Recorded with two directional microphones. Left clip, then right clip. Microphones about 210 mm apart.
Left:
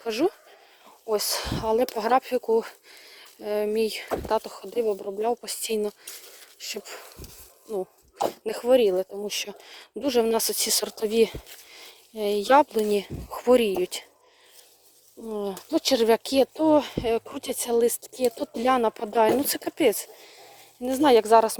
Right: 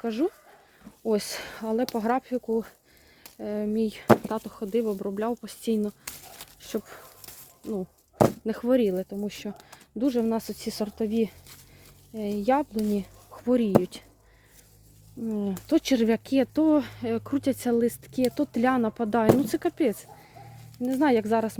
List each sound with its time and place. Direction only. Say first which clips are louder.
1.1 s speech: left 4 dB; 10° left (ahead or behind); by 1.9 s 25° left (ahead or behind)
2.0 s speech: left 5 dB; 35° left (ahead or behind)
8.4 s speech: left 4 dB; 20° left (ahead or behind)
9.2 s speech: left 5 dB; 30° left (ahead or behind)
15.3 s speech: right 1 dB; 20° left (ahead or behind)